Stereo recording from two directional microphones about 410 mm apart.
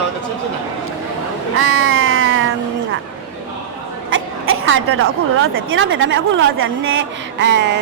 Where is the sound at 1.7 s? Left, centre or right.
Right.